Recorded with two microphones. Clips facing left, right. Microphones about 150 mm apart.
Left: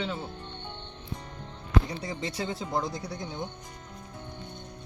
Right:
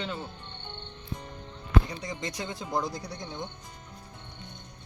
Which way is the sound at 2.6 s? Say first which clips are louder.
Even; centre (ahead or behind).